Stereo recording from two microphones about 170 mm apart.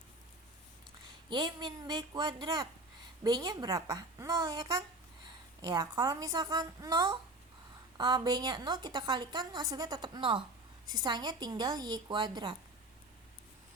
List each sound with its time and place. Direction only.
1.3 s a woman's voice: 25° right (ahead or behind)